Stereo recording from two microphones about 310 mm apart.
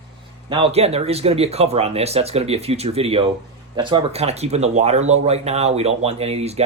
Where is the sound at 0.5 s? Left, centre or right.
Centre.